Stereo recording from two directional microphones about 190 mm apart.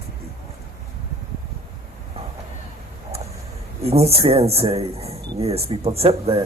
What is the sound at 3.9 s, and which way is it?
Speech, 30° right (ahead or behind).